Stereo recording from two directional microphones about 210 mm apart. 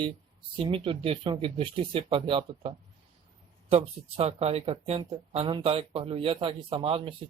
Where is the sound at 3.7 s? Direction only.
25° right (ahead or behind).